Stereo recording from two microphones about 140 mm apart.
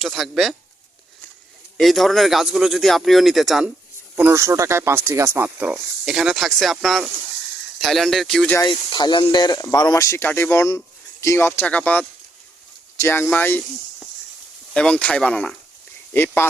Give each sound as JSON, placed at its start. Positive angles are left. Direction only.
{"t": 0.0, "sound": "speech", "side_deg": 0}
{"t": 1.8, "sound": "speech", "side_deg": 0}
{"t": 4.1, "sound": "speech", "side_deg": -15}
{"t": 8.6, "sound": "speech", "side_deg": 35}
{"t": 14.7, "sound": "speech", "side_deg": 5}
{"t": 16.1, "sound": "speech", "side_deg": 15}